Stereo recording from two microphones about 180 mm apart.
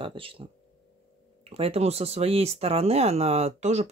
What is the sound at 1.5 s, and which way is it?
Speech, 35° right (ahead or behind).